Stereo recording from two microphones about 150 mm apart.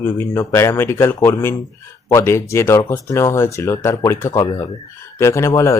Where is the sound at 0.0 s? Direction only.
15° left (ahead or behind).